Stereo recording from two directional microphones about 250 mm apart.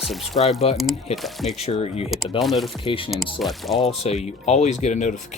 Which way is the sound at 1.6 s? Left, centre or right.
Left.